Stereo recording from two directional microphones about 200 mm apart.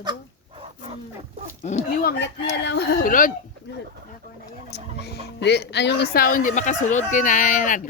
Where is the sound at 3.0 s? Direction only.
40° left (ahead or behind).